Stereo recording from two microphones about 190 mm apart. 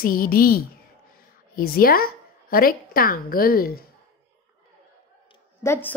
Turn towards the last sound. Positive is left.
turn(degrees=10)  # may be behind; listen again after turning